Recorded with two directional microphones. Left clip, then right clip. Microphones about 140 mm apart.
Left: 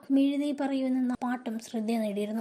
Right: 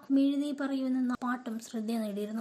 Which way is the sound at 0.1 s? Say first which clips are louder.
Left 2 dB; 15° left (ahead or behind).